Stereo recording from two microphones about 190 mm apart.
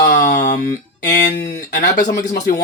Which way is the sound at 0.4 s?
45° left (ahead or behind).